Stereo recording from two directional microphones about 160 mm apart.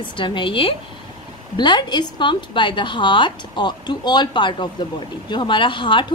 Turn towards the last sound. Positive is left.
turn(degrees=30)  # may be behind; listen again after turning